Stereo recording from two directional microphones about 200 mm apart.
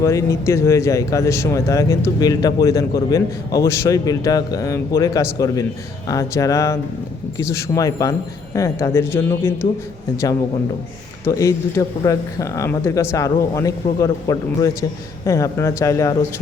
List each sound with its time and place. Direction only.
0.0 s speech: 15° left (ahead or behind)
11.3 s speech: 15° left (ahead or behind)